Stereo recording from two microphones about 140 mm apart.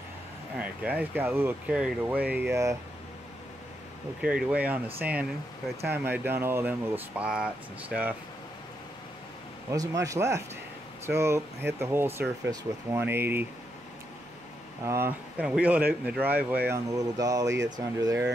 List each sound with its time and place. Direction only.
0.6 s speech: 10° right (ahead or behind)
4.2 s speech: 5° right (ahead or behind)
9.7 s speech: 20° right (ahead or behind)
14.9 s speech: 15° right (ahead or behind)
16.9 s speech: 25° right (ahead or behind)